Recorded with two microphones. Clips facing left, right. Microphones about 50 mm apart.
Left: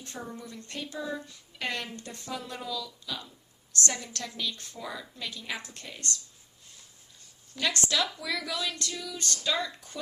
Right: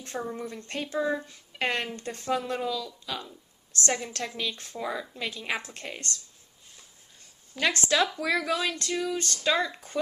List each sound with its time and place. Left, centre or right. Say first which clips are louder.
0.0 s a woman's voice: right 6 dB; right
7.5 s speech: right 4 dB; right